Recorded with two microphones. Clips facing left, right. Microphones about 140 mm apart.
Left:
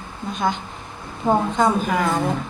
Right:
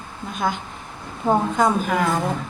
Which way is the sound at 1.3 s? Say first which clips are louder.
Even; 5° right (ahead or behind).